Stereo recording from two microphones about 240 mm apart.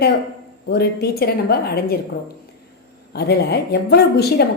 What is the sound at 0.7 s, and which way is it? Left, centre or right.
A woman's voice, left.